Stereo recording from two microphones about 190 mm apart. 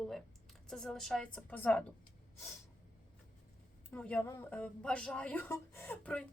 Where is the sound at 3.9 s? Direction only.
5° left (ahead or behind).